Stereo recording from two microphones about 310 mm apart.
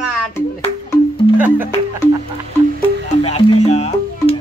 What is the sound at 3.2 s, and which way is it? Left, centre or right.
Music, centre.